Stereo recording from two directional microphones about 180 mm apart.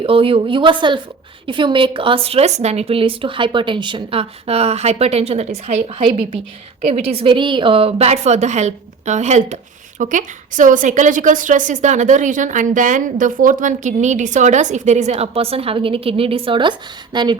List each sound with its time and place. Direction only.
0.0 s a woman's voice: 30° right (ahead or behind)